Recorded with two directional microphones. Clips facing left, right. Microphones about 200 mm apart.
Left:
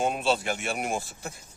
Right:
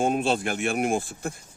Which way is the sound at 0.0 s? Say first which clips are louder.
Right 3 dB; 50° right (ahead or behind).